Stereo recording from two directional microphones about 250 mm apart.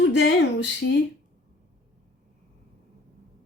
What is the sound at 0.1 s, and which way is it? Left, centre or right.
Speech, left.